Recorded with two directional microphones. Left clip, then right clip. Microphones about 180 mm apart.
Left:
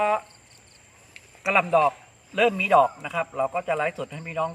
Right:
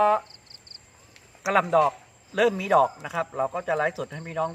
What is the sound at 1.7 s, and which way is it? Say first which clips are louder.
A man's voice: left 1 dB; 25° right (ahead or behind).